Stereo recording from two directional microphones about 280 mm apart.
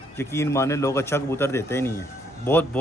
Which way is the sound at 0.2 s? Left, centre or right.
Centre.